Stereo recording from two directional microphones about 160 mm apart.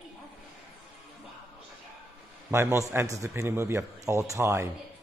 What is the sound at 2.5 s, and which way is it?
A man's voice, 15° right (ahead or behind).